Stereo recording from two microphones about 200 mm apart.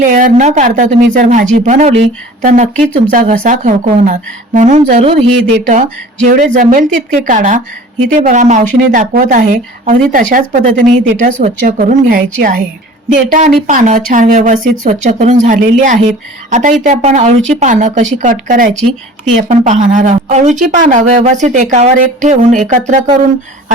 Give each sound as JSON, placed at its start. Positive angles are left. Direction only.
{"t": 0.0, "sound": "speech", "side_deg": -40}